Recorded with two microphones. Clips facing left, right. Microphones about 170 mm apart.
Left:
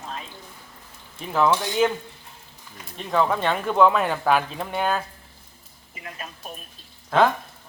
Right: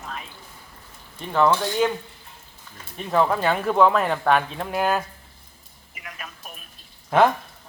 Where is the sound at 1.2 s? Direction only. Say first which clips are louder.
Right 1 dB; 5° left (ahead or behind).